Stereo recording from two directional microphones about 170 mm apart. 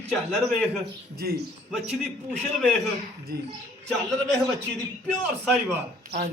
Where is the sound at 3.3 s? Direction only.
65° right (ahead or behind).